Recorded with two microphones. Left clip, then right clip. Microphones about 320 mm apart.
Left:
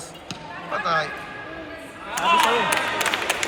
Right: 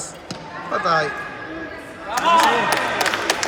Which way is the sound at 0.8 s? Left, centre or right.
Centre.